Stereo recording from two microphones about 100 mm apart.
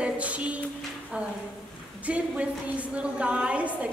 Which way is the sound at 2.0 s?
15° right (ahead or behind).